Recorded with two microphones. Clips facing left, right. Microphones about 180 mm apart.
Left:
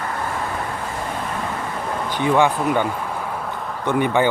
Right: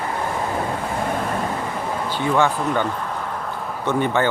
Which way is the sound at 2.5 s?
5° left (ahead or behind).